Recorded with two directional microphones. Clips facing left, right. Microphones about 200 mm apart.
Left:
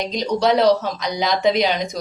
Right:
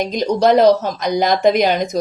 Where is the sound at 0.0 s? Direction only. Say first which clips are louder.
Right 4 dB; 50° right (ahead or behind).